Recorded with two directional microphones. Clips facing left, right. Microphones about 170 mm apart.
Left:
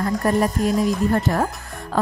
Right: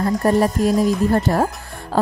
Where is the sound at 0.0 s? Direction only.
35° right (ahead or behind).